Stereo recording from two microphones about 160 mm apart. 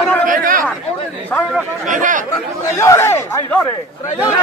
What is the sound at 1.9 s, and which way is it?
Speech, 55° right (ahead or behind).